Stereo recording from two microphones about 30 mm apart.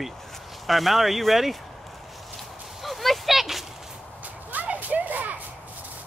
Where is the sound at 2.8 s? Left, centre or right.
Centre.